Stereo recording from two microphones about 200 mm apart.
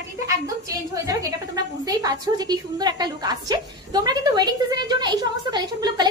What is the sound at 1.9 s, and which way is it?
A woman's voice, 20° right (ahead or behind).